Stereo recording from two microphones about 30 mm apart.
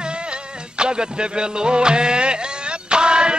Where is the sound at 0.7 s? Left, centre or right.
Right.